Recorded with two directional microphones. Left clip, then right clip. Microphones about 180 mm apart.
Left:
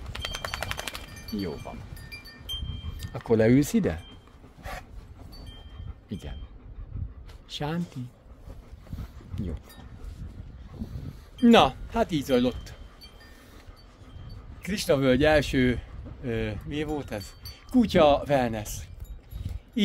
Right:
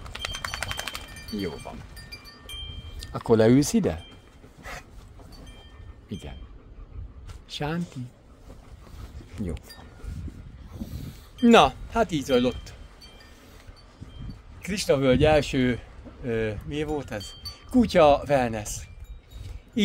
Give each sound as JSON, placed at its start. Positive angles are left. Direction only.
{"t": 0.1, "sound": "a sound", "side_deg": 0}
{"t": 1.3, "sound": "speech", "side_deg": -15}
{"t": 3.0, "sound": "a man's voice", "side_deg": 0}
{"t": 6.0, "sound": "speech", "side_deg": 0}
{"t": 7.4, "sound": "speech", "side_deg": -10}
{"t": 11.4, "sound": "a man's voice", "side_deg": -10}
{"t": 14.6, "sound": "a man's voice", "side_deg": 0}